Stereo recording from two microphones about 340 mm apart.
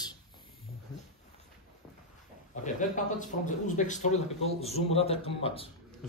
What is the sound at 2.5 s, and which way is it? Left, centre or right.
A man's voice, left.